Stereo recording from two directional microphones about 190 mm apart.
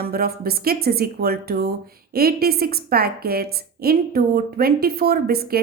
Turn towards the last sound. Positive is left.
turn(degrees=-55)  # may be behind; listen again after turning